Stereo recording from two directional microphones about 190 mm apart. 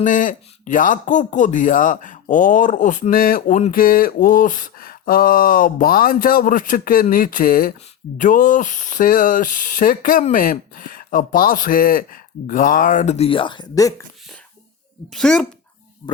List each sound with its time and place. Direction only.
0.0 s speech: 45° left (ahead or behind); by 13.9 s 20° left (ahead or behind)
15.1 s speech: 5° left (ahead or behind)
16.0 s speech: 20° left (ahead or behind)